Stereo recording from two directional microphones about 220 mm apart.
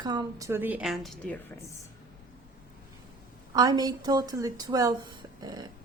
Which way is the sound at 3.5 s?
20° right (ahead or behind).